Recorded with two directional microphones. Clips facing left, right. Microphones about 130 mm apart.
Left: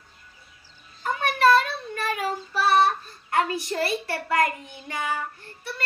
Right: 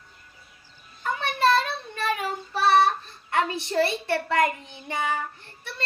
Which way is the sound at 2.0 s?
25° right (ahead or behind).